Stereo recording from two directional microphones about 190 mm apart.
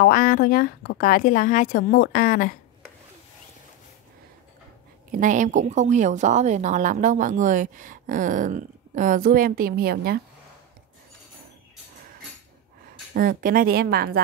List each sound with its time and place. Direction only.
0.0 s a woman's voice: 50° left (ahead or behind)
5.1 s a woman's voice: 40° right (ahead or behind)
13.1 s a woman's voice: 50° right (ahead or behind)